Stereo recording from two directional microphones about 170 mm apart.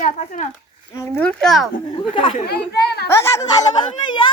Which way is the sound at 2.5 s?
70° left (ahead or behind).